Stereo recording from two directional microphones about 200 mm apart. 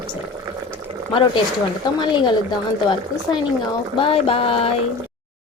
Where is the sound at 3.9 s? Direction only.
25° left (ahead or behind).